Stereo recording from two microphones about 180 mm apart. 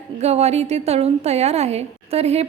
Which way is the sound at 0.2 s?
35° right (ahead or behind).